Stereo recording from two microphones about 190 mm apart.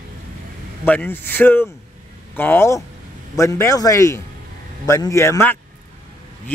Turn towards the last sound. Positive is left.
turn(degrees=10)  # may be behind; listen again after turning